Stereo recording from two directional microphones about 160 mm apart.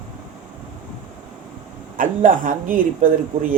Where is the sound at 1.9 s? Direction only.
60° right (ahead or behind).